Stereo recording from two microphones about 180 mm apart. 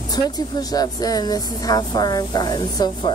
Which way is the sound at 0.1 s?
20° left (ahead or behind).